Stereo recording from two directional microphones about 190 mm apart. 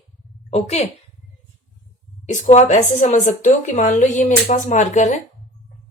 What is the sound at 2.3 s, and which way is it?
A woman's voice, 40° left (ahead or behind).